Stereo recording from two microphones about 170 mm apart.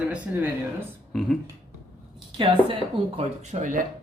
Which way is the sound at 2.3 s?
30° right (ahead or behind).